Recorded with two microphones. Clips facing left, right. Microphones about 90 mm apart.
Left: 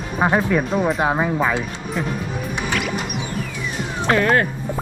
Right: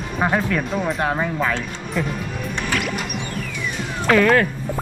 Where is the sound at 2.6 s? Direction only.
5° left (ahead or behind).